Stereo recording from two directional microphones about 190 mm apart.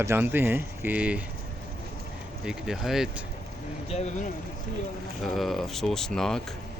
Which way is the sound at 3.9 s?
35° left (ahead or behind).